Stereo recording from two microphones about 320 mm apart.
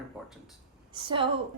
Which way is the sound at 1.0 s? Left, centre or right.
Centre.